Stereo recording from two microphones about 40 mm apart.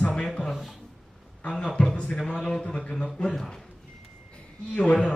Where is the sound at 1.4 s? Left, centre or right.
Left.